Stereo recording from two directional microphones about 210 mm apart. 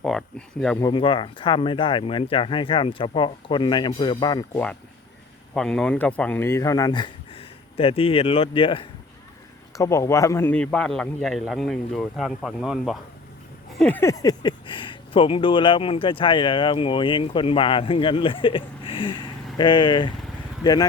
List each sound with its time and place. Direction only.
0.0 s a man's voice: centre (ahead or behind)
0.8 s speech: 20° left (ahead or behind)
5.5 s a man's voice: 5° left (ahead or behind); by 20.1 s 20° left (ahead or behind)